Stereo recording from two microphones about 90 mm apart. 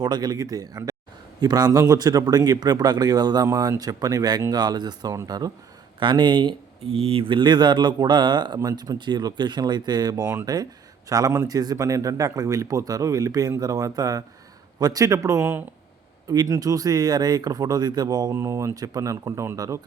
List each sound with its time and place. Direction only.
0.0 s a man's voice: 50° right (ahead or behind)
6.0 s a man's voice: 60° right (ahead or behind); by 15.6 s 30° right (ahead or behind)
16.3 s speech: 45° right (ahead or behind)
18.3 s a man's voice: 35° right (ahead or behind)